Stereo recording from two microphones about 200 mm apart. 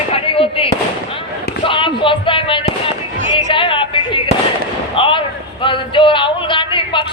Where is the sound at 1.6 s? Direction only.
25° left (ahead or behind).